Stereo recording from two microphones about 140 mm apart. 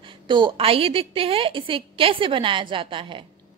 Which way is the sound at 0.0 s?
35° right (ahead or behind).